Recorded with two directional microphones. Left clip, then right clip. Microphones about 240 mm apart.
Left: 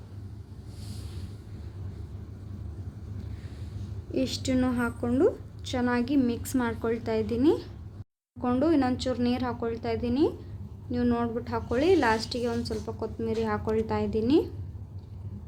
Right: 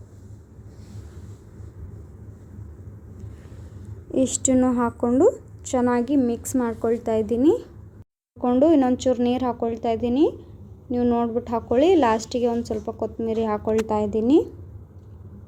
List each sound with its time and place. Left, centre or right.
4.5 s a woman's voice: centre